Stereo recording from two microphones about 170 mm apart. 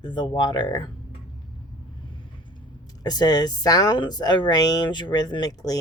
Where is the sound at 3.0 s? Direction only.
25° left (ahead or behind).